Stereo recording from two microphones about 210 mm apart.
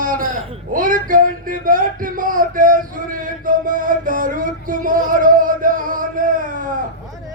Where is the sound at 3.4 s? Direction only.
40° right (ahead or behind).